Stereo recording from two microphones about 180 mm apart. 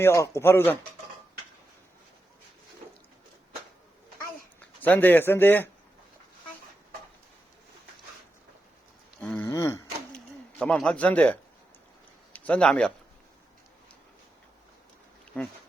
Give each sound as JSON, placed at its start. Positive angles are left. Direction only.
{"t": 0.0, "sound": "speech", "side_deg": 15}
{"t": 4.6, "sound": "speech", "side_deg": 10}
{"t": 9.2, "sound": "a sound", "side_deg": 5}
{"t": 9.5, "sound": "a sound", "side_deg": 15}
{"t": 10.2, "sound": "speech", "side_deg": 5}
{"t": 15.3, "sound": "speech", "side_deg": 5}